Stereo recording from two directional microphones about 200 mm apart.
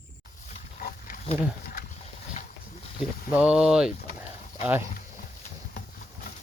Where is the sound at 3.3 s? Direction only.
5° right (ahead or behind).